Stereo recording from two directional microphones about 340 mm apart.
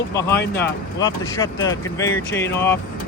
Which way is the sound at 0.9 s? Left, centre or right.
Centre.